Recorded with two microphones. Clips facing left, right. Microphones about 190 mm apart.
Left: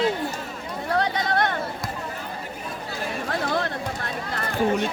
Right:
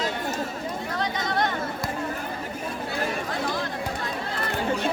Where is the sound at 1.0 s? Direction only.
60° left (ahead or behind).